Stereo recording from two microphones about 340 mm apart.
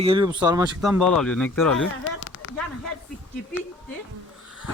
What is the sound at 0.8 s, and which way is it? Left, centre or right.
Speech, centre.